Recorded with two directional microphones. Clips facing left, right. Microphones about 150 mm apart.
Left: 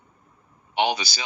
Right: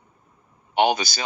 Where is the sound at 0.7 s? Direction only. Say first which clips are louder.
Right 4 dB; 50° right (ahead or behind).